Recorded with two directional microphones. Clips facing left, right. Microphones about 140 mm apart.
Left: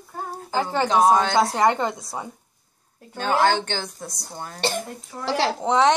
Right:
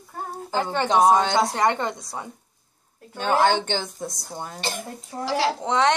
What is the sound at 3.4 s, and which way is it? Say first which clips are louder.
Speech: even; 20° right (ahead or behind).